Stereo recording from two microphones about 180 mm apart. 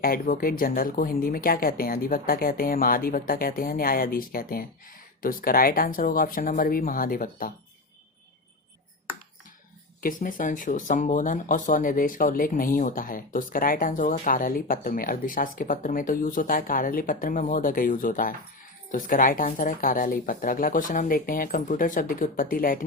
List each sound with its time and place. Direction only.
0.0 s speech: 55° left (ahead or behind)
10.0 s speech: 50° left (ahead or behind)